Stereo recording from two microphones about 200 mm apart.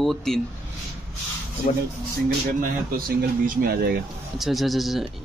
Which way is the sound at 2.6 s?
45° right (ahead or behind).